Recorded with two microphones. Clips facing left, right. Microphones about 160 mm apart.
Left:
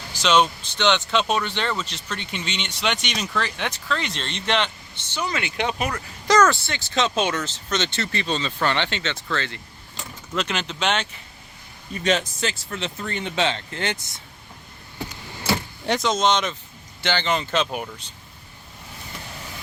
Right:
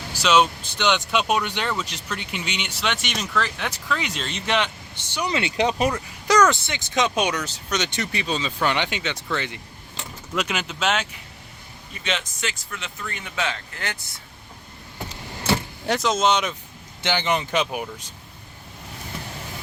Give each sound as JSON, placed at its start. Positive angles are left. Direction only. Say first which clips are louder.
{"t": 0.1, "sound": "speech", "louder": "even", "side_deg": -10}
{"t": 5.3, "sound": "speech", "louder": "right 3 dB", "side_deg": -25}
{"t": 5.5, "sound": "speech", "louder": "right 5 dB", "side_deg": -35}
{"t": 5.9, "sound": "speech", "louder": "even", "side_deg": -10}
{"t": 12.0, "sound": "speech", "louder": "left 6 dB", "side_deg": 40}
{"t": 15.9, "sound": "speech", "louder": "even", "side_deg": -5}